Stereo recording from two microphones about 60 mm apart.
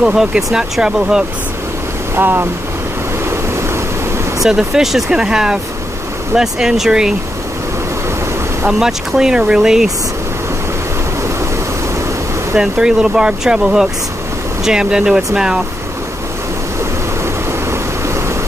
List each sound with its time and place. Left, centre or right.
0.0 s speech: centre
2.1 s speech: right
4.4 s speech: centre
8.6 s speech: centre
12.5 s speech: centre